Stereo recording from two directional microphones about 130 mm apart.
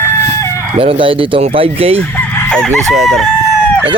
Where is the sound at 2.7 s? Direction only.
Centre (ahead or behind).